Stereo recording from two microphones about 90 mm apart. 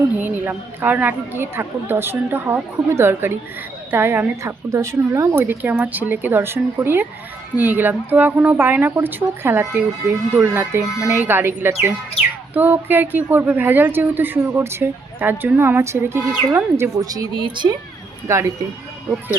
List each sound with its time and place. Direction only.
0.2 s a woman's voice: 20° right (ahead or behind)
16.9 s speech: 40° right (ahead or behind)
17.3 s speech: 65° right (ahead or behind)
18.3 s speech: 35° right (ahead or behind)